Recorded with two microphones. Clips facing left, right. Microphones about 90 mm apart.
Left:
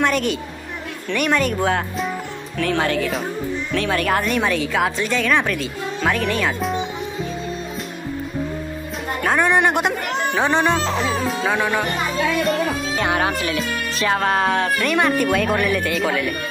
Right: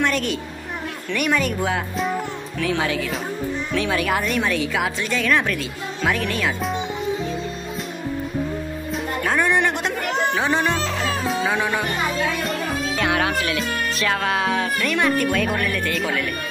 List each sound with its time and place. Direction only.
0.0 s a sound: centre (ahead or behind)
1.1 s a woman's voice: centre (ahead or behind)
9.2 s music: centre (ahead or behind)
10.7 s music: 20° left (ahead or behind)
11.2 s music: centre (ahead or behind)
12.4 s a woman's voice: 5° left (ahead or behind)